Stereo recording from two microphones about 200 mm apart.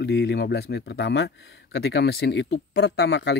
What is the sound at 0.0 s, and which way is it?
Speech, 55° left (ahead or behind).